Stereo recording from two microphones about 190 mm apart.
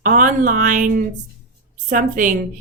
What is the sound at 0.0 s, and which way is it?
Speech, 45° right (ahead or behind).